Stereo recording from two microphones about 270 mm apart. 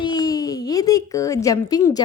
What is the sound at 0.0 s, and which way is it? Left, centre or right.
A woman's voice, centre.